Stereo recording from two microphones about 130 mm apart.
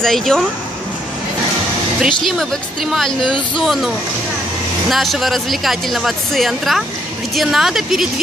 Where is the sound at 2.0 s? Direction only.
Centre (ahead or behind).